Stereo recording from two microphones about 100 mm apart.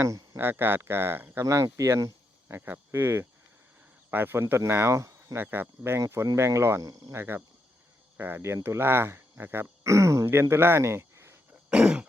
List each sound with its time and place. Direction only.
0.0 s speech: 30° right (ahead or behind)
1.5 s speech: 30° right (ahead or behind)
2.6 s speech: 20° right (ahead or behind)
11.7 s throat clearing: 10° right (ahead or behind)